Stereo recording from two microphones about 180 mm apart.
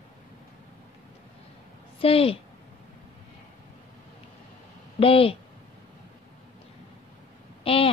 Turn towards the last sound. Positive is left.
turn(degrees=30)  # may be behind; listen again after turning